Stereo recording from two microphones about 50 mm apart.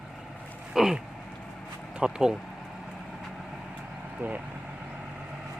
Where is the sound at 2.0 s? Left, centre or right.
Centre.